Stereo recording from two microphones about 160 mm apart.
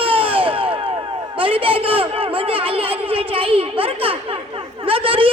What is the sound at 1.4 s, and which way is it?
Music, 35° right (ahead or behind).